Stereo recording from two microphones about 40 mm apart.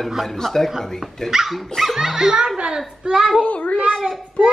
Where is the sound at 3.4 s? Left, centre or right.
Left.